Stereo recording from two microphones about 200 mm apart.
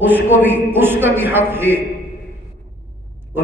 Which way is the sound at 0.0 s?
10° right (ahead or behind).